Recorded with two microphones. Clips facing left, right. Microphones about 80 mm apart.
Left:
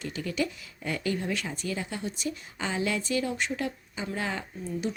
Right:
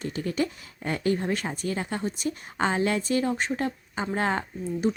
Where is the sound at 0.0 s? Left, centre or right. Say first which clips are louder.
Right 3 dB; right.